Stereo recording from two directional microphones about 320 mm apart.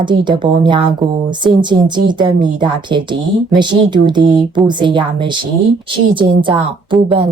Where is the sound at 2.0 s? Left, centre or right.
Centre.